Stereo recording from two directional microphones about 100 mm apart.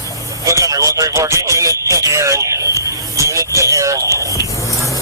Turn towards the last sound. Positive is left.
turn(degrees=-30)  # may be behind; listen again after turning